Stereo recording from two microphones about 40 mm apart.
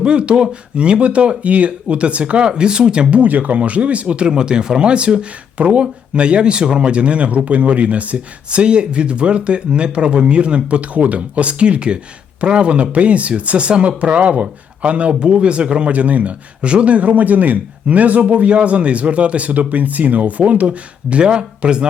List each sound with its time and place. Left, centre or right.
0.0 s speech: right
3.2 s speech: right